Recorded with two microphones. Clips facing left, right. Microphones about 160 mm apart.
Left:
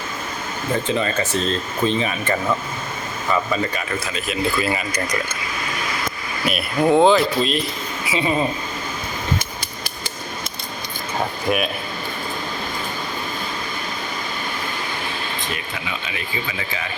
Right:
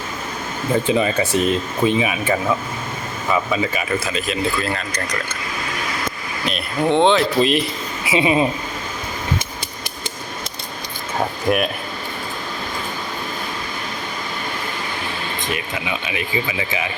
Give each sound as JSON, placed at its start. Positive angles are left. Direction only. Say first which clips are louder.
{"t": 0.9, "sound": "speech", "louder": "right 3 dB", "side_deg": -10}
{"t": 6.4, "sound": "speech", "louder": "left 2 dB", "side_deg": 5}
{"t": 8.1, "sound": "speech", "louder": "right 4 dB", "side_deg": -10}
{"t": 11.5, "sound": "speech", "louder": "right 3 dB", "side_deg": -5}